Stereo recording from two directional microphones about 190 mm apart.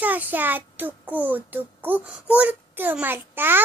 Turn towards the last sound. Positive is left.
turn(degrees=-10)  # may be behind; listen again after turning